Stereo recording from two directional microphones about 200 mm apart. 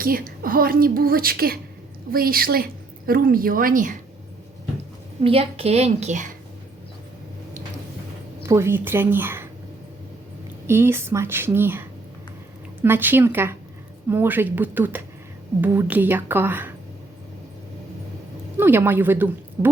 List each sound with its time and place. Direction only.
0.0 s a woman's voice: 45° right (ahead or behind)
5.2 s a woman's voice: 30° right (ahead or behind)
8.4 s a woman's voice: 15° right (ahead or behind)
10.7 s a woman's voice: 10° right (ahead or behind)
18.5 s a woman's voice: 10° right (ahead or behind)